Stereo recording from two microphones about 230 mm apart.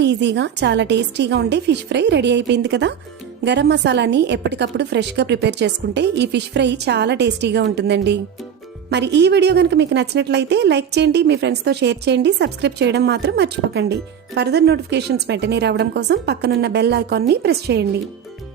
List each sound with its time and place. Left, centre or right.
0.0 s a woman's voice: right